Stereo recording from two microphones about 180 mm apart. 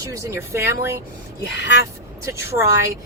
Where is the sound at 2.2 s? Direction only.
15° right (ahead or behind).